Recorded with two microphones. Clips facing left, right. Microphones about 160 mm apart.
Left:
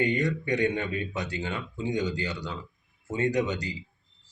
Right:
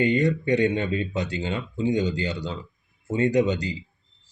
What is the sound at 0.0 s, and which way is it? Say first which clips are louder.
Speech: right 5 dB; 25° right (ahead or behind).